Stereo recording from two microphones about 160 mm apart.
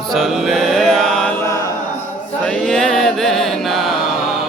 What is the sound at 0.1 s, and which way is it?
Music, centre (ahead or behind).